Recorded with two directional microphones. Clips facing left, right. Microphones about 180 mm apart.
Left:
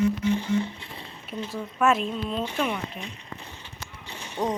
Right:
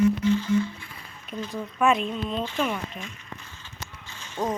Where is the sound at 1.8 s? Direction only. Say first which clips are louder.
Even; 5° left (ahead or behind).